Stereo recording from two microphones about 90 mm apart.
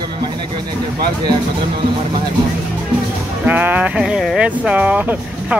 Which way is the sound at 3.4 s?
15° right (ahead or behind).